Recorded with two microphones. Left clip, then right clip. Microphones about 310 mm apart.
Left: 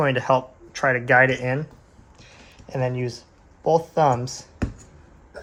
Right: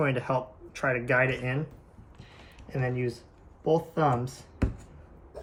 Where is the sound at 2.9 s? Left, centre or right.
Left.